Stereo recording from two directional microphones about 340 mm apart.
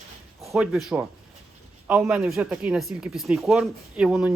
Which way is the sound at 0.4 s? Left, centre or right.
Centre.